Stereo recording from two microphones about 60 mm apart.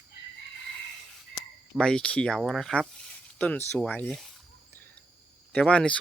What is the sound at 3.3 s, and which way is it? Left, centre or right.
Speech, left.